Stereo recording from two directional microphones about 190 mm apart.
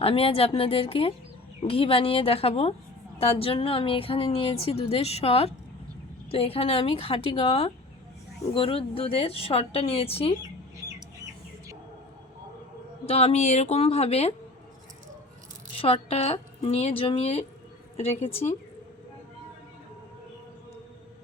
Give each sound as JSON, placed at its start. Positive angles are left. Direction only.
{"t": 0.0, "sound": "a woman's voice", "side_deg": 30}
{"t": 13.1, "sound": "a woman's voice", "side_deg": 35}
{"t": 15.8, "sound": "a woman's voice", "side_deg": 30}